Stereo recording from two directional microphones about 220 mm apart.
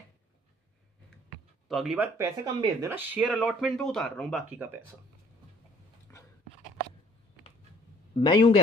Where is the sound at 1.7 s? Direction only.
Centre (ahead or behind).